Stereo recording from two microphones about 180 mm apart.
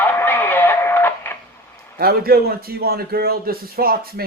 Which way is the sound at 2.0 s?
60° right (ahead or behind).